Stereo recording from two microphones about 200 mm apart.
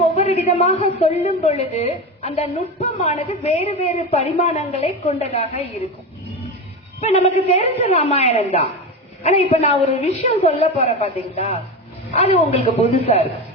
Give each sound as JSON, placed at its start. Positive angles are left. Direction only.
{"t": 0.2, "sound": "a woman's voice", "side_deg": 30}
{"t": 7.0, "sound": "a woman's voice", "side_deg": 30}